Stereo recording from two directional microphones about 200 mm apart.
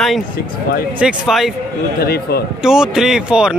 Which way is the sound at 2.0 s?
50° left (ahead or behind).